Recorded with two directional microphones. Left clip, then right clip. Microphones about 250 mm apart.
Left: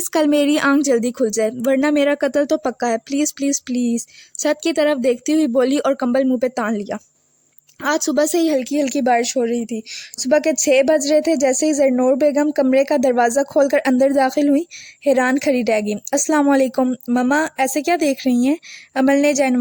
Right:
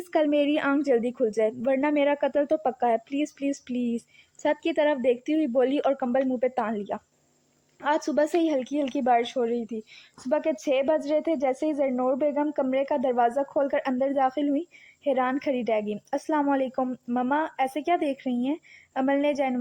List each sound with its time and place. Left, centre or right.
0.1 s a woman's voice: left